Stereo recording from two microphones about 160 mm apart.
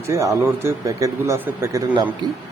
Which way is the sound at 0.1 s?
20° right (ahead or behind).